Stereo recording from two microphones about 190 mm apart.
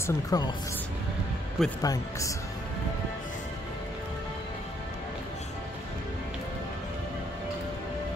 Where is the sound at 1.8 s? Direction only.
20° left (ahead or behind).